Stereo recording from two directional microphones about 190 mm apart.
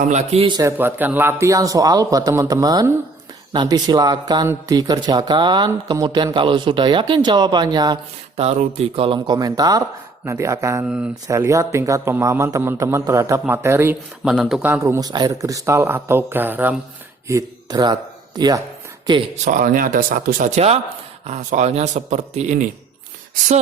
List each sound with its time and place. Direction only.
0.0 s speech: 35° right (ahead or behind)
0.8 s speech: 10° right (ahead or behind)
8.4 s speech: 30° right (ahead or behind); by 13.9 s 15° right (ahead or behind)
14.3 s speech: centre (ahead or behind); by 18.6 s 20° right (ahead or behind)
19.5 s speech: 45° right (ahead or behind)